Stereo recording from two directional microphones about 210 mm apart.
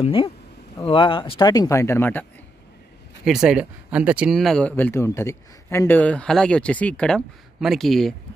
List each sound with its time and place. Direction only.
0.0 s speech: 25° left (ahead or behind); by 2.2 s 10° left (ahead or behind)
3.3 s speech: 5° right (ahead or behind)